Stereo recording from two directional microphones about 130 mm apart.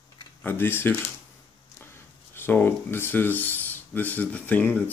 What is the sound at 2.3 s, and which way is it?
Speech, 15° left (ahead or behind).